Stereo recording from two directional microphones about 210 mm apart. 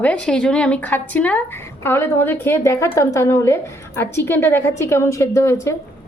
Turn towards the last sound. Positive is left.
turn(degrees=15)  # may be behind; listen again after turning